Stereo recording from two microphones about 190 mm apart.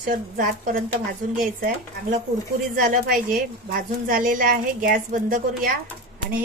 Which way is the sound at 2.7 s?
50° right (ahead or behind).